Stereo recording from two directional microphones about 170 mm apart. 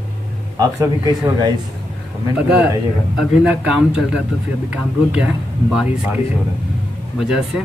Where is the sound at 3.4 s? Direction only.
5° right (ahead or behind).